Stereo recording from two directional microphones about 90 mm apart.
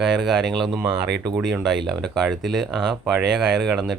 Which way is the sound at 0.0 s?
5° right (ahead or behind).